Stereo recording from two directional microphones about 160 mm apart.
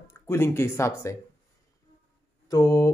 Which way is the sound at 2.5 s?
20° left (ahead or behind).